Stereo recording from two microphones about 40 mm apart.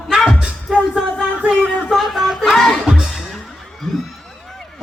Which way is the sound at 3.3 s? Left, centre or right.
Centre.